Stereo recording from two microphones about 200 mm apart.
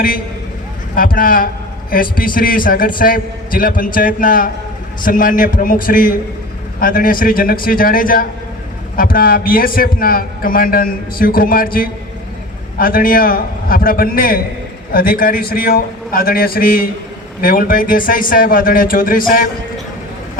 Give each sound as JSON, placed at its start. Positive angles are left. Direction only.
{"t": 0.9, "sound": "a man's voice", "side_deg": 45}